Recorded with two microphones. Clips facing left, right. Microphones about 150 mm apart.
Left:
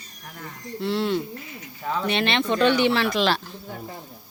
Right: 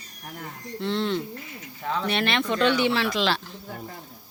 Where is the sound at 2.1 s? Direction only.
20° left (ahead or behind).